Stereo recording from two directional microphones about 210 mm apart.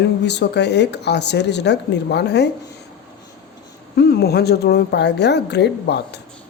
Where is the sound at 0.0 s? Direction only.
55° left (ahead or behind).